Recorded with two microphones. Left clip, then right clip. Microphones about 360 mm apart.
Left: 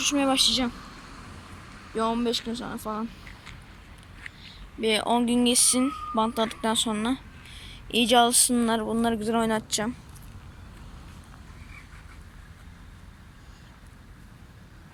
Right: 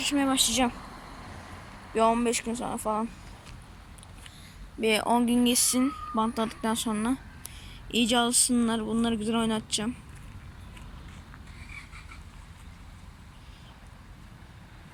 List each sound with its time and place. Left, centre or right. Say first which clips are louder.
0.0 s speech: left 3 dB; centre
0.7 s vehicle: right 1 dB; right
2.0 s speech: right 2 dB; centre
4.2 s speech: left 9 dB; centre